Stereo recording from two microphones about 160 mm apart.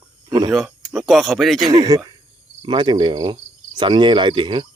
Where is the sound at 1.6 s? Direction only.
25° right (ahead or behind).